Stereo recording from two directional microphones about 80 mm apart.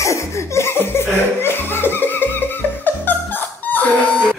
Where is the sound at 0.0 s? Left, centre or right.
Left; by 4.4 s centre.